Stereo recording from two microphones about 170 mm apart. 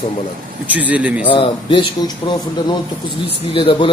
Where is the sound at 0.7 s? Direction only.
10° right (ahead or behind).